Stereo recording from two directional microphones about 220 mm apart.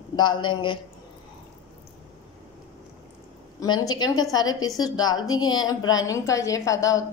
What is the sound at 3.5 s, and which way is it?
A woman's voice, 15° left (ahead or behind).